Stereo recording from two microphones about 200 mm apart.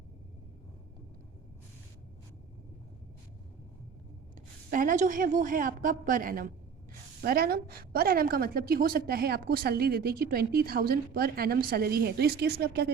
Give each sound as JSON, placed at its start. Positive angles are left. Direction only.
{"t": 4.7, "sound": "a woman's voice", "side_deg": -40}